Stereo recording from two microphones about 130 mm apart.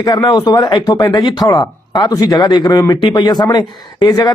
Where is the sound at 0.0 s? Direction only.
35° left (ahead or behind).